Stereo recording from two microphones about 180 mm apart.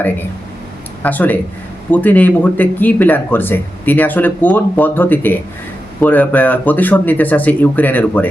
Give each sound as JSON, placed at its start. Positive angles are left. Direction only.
{"t": 1.0, "sound": "speech", "side_deg": 10}